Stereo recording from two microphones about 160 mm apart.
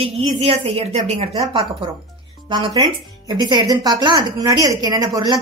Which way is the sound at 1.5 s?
30° right (ahead or behind).